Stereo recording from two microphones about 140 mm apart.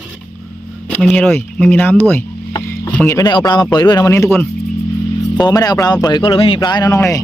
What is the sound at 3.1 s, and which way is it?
Speech, 25° left (ahead or behind).